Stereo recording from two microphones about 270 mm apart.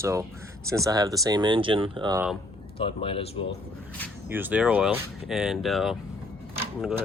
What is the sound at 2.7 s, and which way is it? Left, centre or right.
Speech, centre.